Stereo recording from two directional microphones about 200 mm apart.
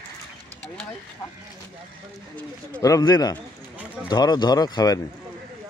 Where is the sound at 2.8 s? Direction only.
15° left (ahead or behind).